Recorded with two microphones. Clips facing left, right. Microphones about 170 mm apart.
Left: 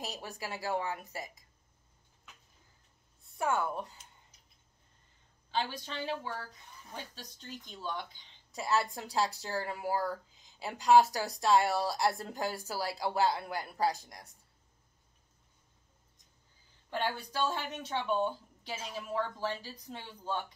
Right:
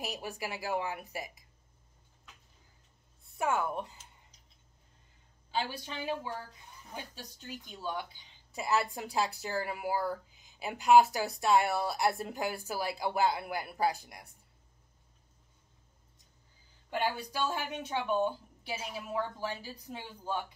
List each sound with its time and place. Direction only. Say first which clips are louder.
0.0 s a woman's voice: right 3 dB; 15° right (ahead or behind)
3.4 s a woman's voice: right 1 dB; 15° right (ahead or behind)
5.5 s a woman's voice: even; 10° right (ahead or behind)
16.9 s a woman's voice: right 1 dB; 10° right (ahead or behind)